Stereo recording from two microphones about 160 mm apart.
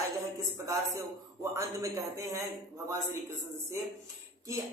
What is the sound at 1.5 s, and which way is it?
Speech, 20° right (ahead or behind).